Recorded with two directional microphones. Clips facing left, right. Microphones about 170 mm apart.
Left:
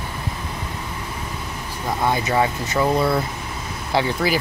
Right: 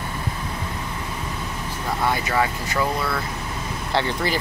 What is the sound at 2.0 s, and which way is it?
Speech, 20° left (ahead or behind).